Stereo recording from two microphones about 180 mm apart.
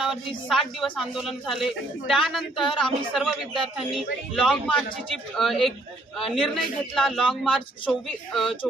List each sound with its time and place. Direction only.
0.0 s a man's voice: centre (ahead or behind)
2.6 s speech: 25° left (ahead or behind)
3.2 s a man's voice: 5° right (ahead or behind)